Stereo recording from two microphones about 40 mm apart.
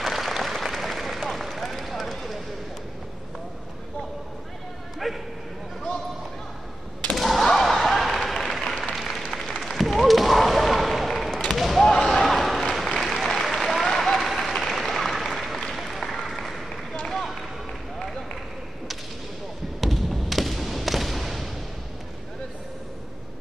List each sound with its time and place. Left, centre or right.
0.0 s applause: centre
1.4 s run: centre
4.9 s bow-wow: centre
7.2 s a sound: centre
7.5 s slam: centre
8.3 s applause: centre
9.6 s a sound: centre
11.8 s a sound: centre
12.1 s a sound: centre
12.8 s applause: centre
17.0 s run: centre
19.8 s thump: centre